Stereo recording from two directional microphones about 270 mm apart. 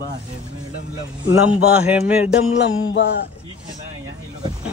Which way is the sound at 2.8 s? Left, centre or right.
Left.